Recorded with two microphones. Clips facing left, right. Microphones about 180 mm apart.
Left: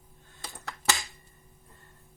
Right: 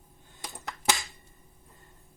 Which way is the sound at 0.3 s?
20° right (ahead or behind).